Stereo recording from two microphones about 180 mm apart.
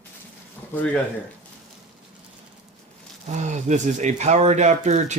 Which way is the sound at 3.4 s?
40° right (ahead or behind).